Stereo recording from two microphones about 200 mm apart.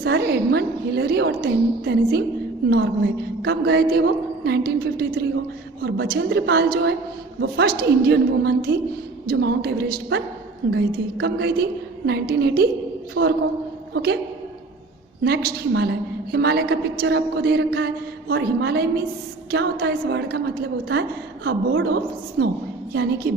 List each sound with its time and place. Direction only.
0.0 s a woman's voice: 60° right (ahead or behind)
13.2 s a woman's voice: 70° right (ahead or behind)
13.9 s a woman's voice: 55° right (ahead or behind)
15.2 s a woman's voice: 55° right (ahead or behind)
21.4 s a woman's voice: 55° right (ahead or behind)